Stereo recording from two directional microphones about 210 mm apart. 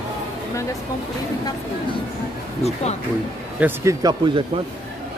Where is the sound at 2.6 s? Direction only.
30° left (ahead or behind).